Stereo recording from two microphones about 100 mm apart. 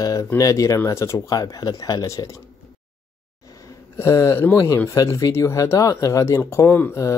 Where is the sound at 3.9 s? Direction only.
30° left (ahead or behind).